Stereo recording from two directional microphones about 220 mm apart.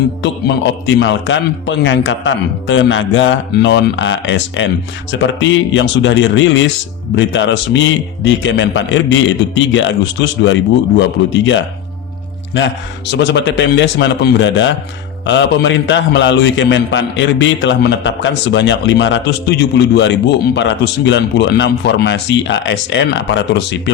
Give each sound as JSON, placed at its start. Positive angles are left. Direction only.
{"t": 0.2, "sound": "a man's voice", "side_deg": 55}